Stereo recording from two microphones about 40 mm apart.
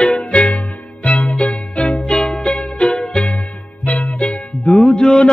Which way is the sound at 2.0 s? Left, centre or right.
Left.